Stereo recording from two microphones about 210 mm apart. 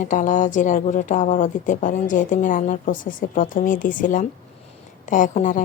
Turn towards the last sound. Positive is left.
turn(degrees=35)  # may be behind; listen again after turning